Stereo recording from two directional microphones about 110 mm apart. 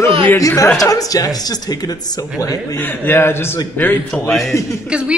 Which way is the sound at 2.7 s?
20° left (ahead or behind).